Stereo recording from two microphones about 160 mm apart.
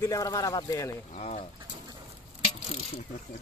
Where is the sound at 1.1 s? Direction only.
40° left (ahead or behind).